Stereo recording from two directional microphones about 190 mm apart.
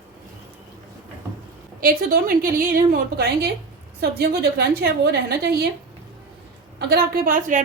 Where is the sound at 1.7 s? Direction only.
50° right (ahead or behind).